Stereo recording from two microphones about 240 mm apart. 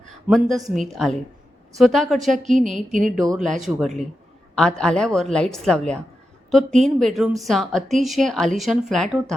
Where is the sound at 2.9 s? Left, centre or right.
Right.